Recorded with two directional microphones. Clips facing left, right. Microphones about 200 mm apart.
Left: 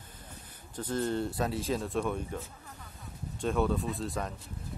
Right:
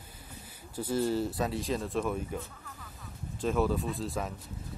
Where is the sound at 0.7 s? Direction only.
10° right (ahead or behind).